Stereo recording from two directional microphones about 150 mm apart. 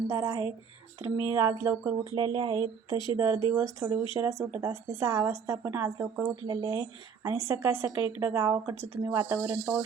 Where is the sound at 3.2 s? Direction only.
20° right (ahead or behind).